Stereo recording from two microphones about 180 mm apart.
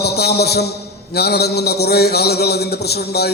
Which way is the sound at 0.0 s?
65° left (ahead or behind).